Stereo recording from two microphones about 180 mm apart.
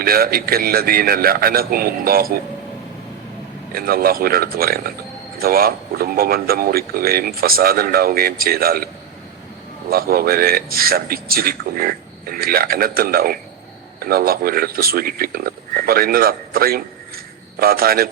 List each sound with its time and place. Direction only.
0.0 s speech: 55° right (ahead or behind)
3.8 s speech: 55° right (ahead or behind)
9.9 s speech: 55° right (ahead or behind)